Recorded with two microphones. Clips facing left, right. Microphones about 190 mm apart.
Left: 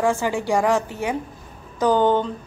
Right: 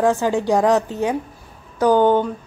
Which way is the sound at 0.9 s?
15° left (ahead or behind).